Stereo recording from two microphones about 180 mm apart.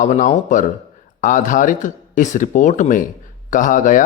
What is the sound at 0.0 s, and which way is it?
Speech, 45° left (ahead or behind).